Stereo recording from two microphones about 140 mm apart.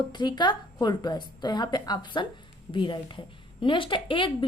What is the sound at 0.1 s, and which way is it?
A woman's voice, 30° left (ahead or behind).